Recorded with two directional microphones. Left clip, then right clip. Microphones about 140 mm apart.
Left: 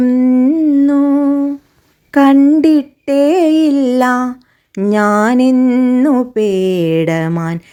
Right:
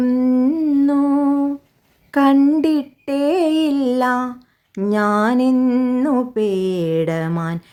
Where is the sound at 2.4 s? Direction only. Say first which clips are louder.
Left 6 dB; 20° left (ahead or behind).